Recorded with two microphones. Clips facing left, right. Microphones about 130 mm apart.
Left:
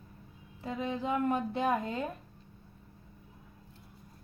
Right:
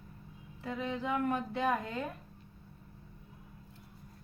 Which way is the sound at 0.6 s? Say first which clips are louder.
Left 2 dB; 20° left (ahead or behind).